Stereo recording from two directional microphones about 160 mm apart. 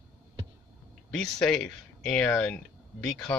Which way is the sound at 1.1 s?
Centre (ahead or behind).